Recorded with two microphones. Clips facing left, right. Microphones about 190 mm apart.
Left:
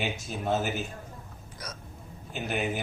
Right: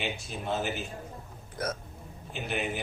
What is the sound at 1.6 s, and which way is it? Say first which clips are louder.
Speech: right 10 dB; 55° right (ahead or behind).